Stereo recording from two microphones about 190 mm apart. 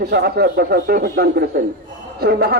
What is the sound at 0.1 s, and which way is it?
Speech, 55° right (ahead or behind).